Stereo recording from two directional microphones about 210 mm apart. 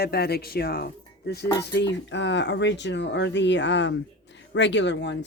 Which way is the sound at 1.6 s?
55° left (ahead or behind).